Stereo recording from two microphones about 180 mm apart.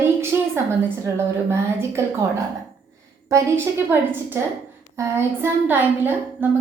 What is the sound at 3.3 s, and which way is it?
A woman's voice, 15° right (ahead or behind).